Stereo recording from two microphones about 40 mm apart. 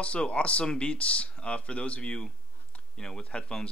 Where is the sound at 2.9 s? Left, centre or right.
Centre.